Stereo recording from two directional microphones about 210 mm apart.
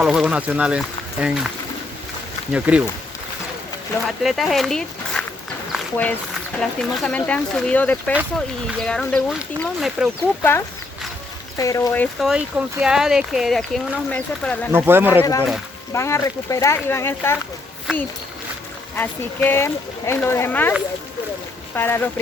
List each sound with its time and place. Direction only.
0.0 s speech: 5° right (ahead or behind)
2.5 s speech: 5° right (ahead or behind)
4.0 s speech: centre (ahead or behind)
5.7 s a sound: 5° left (ahead or behind)
6.6 s speech: 5° left (ahead or behind)
11.5 s speech: 15° left (ahead or behind)
12.2 s speech: 5° right (ahead or behind)
14.7 s speech: 10° right (ahead or behind)
15.2 s speech: 15° left (ahead or behind)
18.9 s speech: 10° left (ahead or behind)
21.8 s speech: 10° left (ahead or behind)